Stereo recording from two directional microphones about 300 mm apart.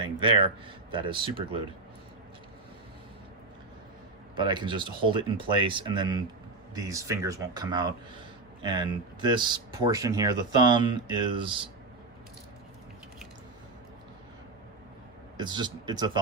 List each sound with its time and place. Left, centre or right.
0.0 s a sound: centre
0.9 s speech: centre
4.4 s speech: centre
15.4 s speech: centre